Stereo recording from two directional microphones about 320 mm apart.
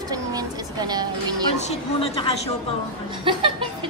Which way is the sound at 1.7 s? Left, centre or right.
Centre.